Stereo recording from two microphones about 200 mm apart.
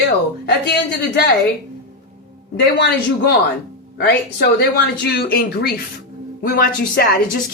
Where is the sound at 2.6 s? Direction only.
55° left (ahead or behind).